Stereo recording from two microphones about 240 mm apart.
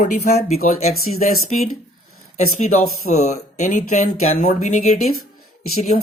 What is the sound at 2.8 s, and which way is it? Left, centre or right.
Speech, left.